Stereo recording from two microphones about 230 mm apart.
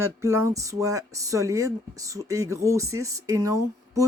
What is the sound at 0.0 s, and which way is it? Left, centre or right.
Speech, centre.